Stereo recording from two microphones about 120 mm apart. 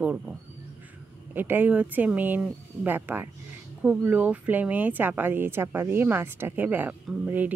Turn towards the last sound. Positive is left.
turn(degrees=-15)  # may be behind; listen again after turning